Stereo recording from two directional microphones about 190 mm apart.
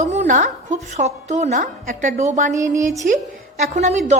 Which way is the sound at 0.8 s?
35° right (ahead or behind).